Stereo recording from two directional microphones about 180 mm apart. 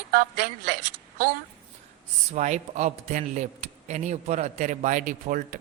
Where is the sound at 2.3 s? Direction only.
40° right (ahead or behind).